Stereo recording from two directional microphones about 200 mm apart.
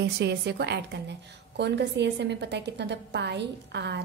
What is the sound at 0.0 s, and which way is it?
A woman's voice, 55° right (ahead or behind).